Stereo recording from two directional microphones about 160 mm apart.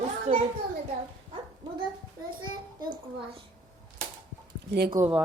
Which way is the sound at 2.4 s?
30° right (ahead or behind).